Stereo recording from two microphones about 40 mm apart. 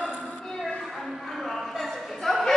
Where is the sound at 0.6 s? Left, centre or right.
Centre.